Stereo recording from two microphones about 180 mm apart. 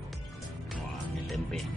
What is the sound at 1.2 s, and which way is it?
Music, centre (ahead or behind).